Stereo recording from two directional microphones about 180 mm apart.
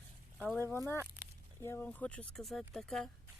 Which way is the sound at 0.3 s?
Centre (ahead or behind).